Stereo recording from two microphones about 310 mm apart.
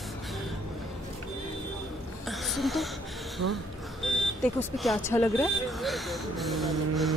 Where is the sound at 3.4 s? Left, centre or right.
Right.